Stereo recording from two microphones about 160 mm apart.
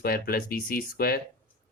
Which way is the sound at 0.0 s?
65° left (ahead or behind).